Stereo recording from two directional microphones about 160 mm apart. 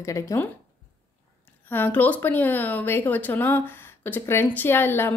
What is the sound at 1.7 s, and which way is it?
A woman's voice, 10° left (ahead or behind).